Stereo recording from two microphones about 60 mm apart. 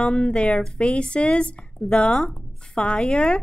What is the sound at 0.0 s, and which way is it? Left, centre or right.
A woman's voice, centre.